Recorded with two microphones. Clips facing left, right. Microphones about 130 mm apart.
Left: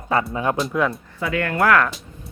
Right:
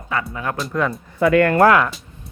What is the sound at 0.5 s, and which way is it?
Speech, centre (ahead or behind).